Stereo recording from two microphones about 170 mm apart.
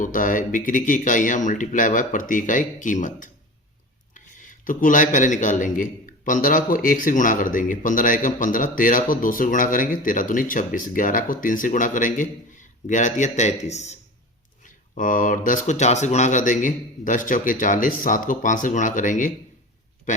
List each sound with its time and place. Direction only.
0.0 s a man's voice: 50° left (ahead or behind)